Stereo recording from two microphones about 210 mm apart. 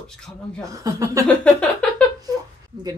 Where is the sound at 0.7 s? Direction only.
15° right (ahead or behind).